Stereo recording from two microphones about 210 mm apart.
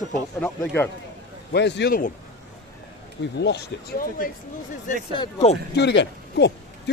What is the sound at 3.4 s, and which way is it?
Speech, 50° left (ahead or behind).